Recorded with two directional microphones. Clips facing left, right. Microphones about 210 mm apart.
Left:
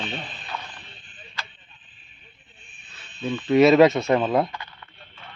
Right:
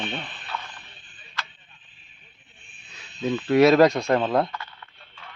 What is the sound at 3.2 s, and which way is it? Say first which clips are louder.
Speech: left 1 dB; 5° right (ahead or behind).